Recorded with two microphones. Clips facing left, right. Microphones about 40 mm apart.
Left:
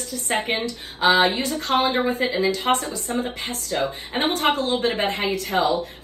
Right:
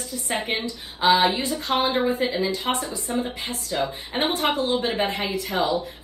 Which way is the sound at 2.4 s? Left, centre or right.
Left.